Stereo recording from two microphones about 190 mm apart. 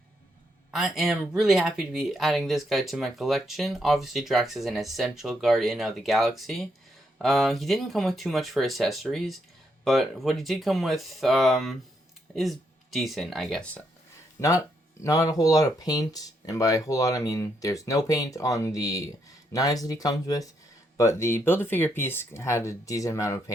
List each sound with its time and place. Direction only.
0.7 s speech: centre (ahead or behind)
15.0 s speech: 15° left (ahead or behind)